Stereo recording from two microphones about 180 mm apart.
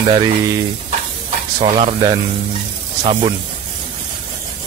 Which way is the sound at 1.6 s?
35° right (ahead or behind).